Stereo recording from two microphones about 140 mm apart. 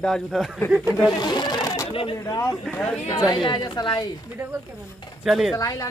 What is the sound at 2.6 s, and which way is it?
Speech, 5° left (ahead or behind).